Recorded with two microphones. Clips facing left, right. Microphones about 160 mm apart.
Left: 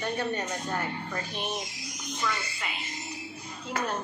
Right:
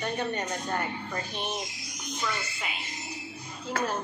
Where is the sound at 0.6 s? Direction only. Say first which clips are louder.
Even; centre (ahead or behind).